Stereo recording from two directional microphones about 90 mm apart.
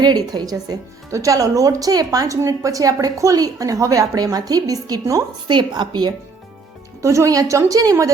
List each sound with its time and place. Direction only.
0.0 s speech: 50° right (ahead or behind)
5.5 s a woman's voice: 60° right (ahead or behind)
7.0 s speech: 35° right (ahead or behind)